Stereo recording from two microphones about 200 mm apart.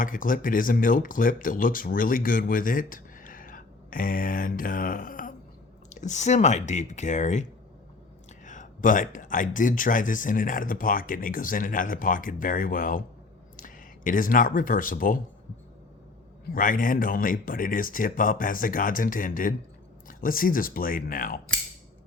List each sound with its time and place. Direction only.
0.0 s speech: 45° left (ahead or behind)
8.4 s speech: 40° left (ahead or behind)
16.5 s speech: 45° left (ahead or behind)